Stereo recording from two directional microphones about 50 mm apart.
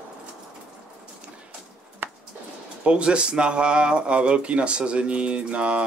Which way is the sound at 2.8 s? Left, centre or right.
Right.